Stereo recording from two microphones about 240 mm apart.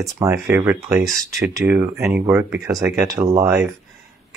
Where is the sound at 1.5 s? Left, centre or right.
Centre.